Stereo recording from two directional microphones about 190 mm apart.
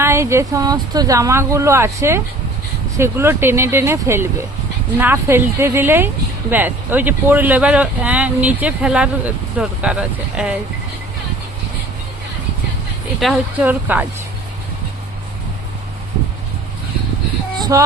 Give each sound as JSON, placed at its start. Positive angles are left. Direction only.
{"t": 0.0, "sound": "speech", "side_deg": -15}
{"t": 13.1, "sound": "speech", "side_deg": 0}
{"t": 17.6, "sound": "music", "side_deg": -20}